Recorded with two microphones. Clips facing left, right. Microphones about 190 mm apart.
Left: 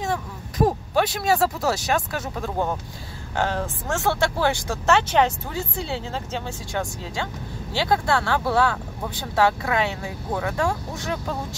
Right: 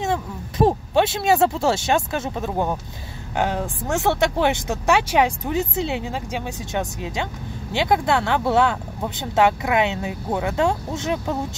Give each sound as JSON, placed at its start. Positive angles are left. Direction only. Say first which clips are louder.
{"t": 0.0, "sound": "speech", "louder": "right 3 dB", "side_deg": -25}